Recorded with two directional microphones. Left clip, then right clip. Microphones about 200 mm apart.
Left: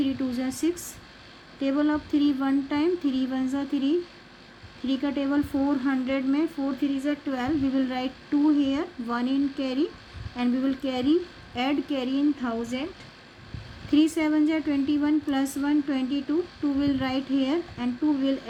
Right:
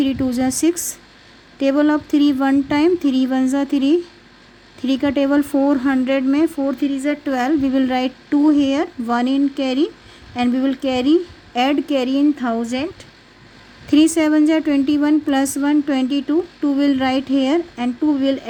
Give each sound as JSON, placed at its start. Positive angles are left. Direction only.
{"t": 0.0, "sound": "a woman's voice", "side_deg": -55}
{"t": 13.9, "sound": "a woman's voice", "side_deg": -55}